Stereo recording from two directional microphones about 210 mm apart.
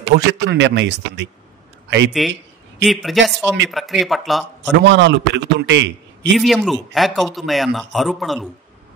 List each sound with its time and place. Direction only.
0.1 s a man's voice: 55° right (ahead or behind)
2.2 s speech: centre (ahead or behind)
4.6 s a man's voice: 60° right (ahead or behind)
6.3 s speech: centre (ahead or behind)